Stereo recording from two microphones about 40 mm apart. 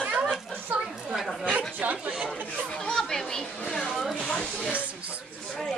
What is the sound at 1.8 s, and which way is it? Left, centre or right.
Chatter, right.